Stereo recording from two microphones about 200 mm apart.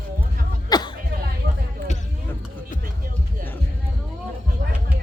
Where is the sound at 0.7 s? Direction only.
20° left (ahead or behind).